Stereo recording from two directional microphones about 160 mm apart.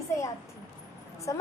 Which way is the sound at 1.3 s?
20° left (ahead or behind).